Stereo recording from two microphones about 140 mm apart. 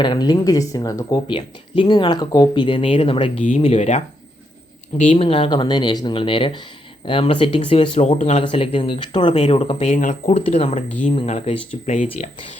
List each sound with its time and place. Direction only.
0.0 s speech: 30° left (ahead or behind)
1.4 s speech: 35° left (ahead or behind); by 4.0 s 55° left (ahead or behind)
5.0 s speech: 45° left (ahead or behind)
9.9 s speech: 70° left (ahead or behind)
10.3 s speech: 50° left (ahead or behind)
12.0 s speech: 45° left (ahead or behind)